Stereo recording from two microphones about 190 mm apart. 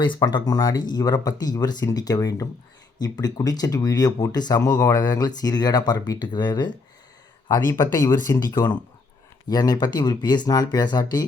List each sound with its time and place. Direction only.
0.0 s speech: 25° left (ahead or behind)